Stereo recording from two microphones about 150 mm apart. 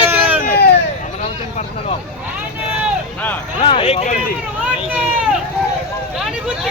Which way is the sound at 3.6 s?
35° left (ahead or behind).